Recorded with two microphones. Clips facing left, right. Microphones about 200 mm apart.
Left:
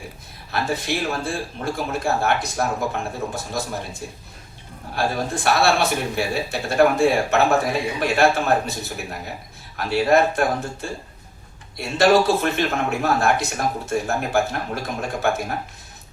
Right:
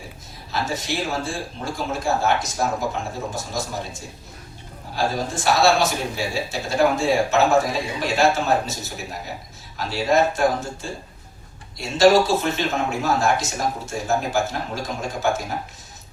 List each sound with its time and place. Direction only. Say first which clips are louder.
0.5 s speech: left 2 dB; 60° left (ahead or behind)